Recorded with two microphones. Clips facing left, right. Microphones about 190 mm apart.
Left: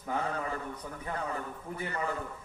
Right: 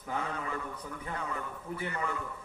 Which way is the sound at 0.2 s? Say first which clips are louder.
Left 2 dB; 35° left (ahead or behind).